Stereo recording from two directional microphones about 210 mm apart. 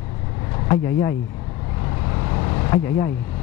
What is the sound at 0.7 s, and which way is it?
Speech, 15° left (ahead or behind).